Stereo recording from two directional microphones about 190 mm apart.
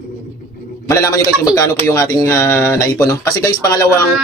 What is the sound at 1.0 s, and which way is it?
Speech, 20° left (ahead or behind).